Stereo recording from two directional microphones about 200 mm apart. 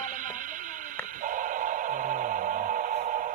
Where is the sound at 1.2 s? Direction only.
40° right (ahead or behind).